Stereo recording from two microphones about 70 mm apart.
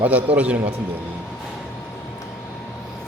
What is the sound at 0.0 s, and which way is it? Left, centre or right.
Speech, right.